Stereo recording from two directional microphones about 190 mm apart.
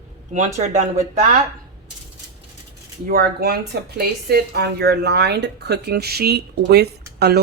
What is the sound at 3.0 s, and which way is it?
Speech, 55° right (ahead or behind).